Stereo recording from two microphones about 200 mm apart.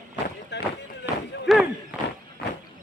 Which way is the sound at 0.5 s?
60° left (ahead or behind).